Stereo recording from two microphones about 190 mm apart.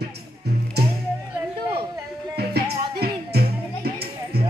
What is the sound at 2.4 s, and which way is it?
Music, 55° right (ahead or behind).